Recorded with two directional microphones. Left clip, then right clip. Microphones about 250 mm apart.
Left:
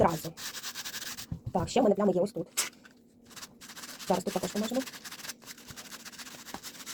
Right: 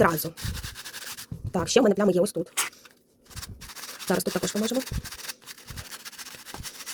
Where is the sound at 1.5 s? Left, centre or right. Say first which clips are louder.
Right 5 dB; right.